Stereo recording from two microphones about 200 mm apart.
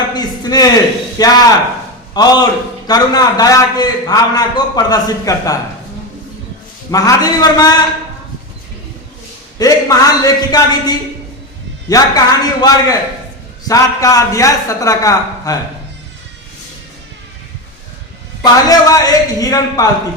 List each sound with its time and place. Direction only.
0.1 s a sound: 20° left (ahead or behind)
1.2 s a man's voice: 20° left (ahead or behind)
6.9 s a man's voice: 15° left (ahead or behind)
9.6 s a man's voice: 20° left (ahead or behind)
18.6 s a man's voice: 15° left (ahead or behind)